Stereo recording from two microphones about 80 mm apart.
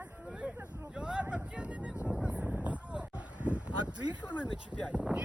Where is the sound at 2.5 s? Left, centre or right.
Centre.